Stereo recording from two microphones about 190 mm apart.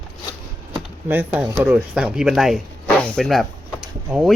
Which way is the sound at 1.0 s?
10° right (ahead or behind).